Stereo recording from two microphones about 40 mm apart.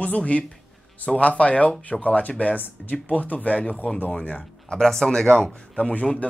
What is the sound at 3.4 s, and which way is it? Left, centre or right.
Speech, left.